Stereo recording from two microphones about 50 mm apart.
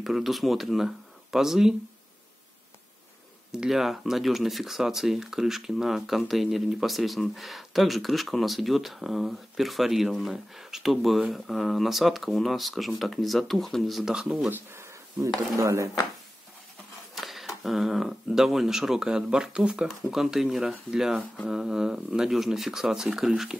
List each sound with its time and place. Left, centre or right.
0.0 s speech: centre
3.5 s speech: centre
14.5 s a sound: right
15.6 s speech: right
17.1 s speech: centre
20.0 s speech: centre